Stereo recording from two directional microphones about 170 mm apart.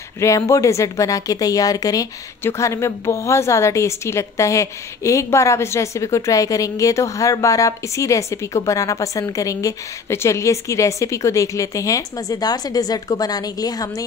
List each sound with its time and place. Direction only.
0.2 s speech: 15° left (ahead or behind)